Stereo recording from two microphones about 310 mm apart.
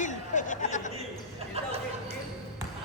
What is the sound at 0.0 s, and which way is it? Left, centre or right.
Chatter, left.